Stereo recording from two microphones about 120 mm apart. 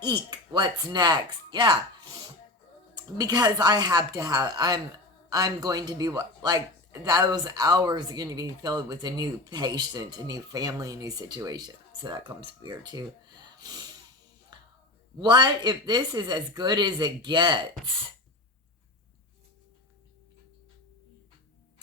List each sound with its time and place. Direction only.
0.0 s speech: 40° right (ahead or behind)
2.9 s speech: 35° right (ahead or behind)
14.5 s music: 35° right (ahead or behind)
15.2 s speech: 40° right (ahead or behind)